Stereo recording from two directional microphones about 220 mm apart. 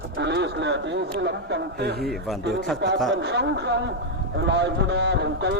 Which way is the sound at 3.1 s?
50° right (ahead or behind).